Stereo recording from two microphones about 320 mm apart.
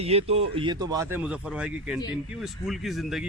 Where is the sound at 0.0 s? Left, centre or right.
Centre.